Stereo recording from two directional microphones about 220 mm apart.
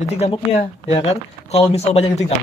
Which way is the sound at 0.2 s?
30° left (ahead or behind).